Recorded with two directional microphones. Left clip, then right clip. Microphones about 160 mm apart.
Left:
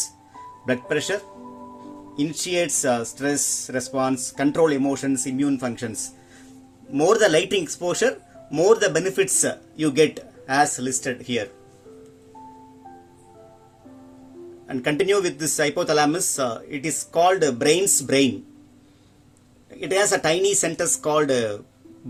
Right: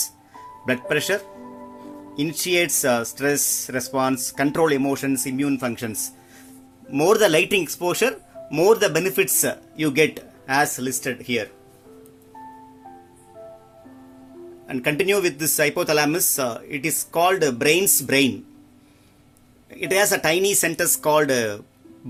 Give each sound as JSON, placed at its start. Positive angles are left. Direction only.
{"t": 0.9, "sound": "speech", "side_deg": -40}
{"t": 1.3, "sound": "music", "side_deg": -10}
{"t": 2.1, "sound": "speech", "side_deg": -35}
{"t": 14.7, "sound": "speech", "side_deg": -30}
{"t": 19.7, "sound": "speech", "side_deg": -30}